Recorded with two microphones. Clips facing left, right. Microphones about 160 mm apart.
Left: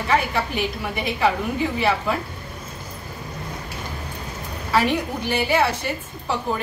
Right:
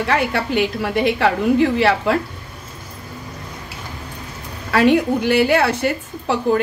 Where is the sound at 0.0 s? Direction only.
80° right.